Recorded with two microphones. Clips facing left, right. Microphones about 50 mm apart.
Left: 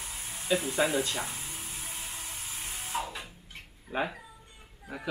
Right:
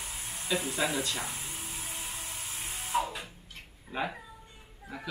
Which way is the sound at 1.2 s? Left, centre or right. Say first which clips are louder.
Left 1 dB; centre.